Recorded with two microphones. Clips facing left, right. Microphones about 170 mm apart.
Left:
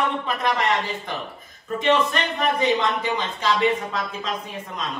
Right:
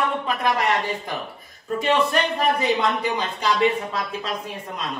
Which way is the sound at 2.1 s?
Centre (ahead or behind).